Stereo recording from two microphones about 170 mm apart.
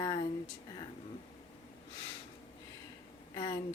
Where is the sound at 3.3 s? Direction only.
30° left (ahead or behind).